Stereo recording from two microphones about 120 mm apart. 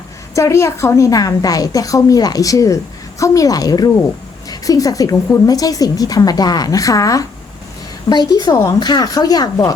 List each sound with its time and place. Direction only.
0.3 s a woman's voice: 25° left (ahead or behind)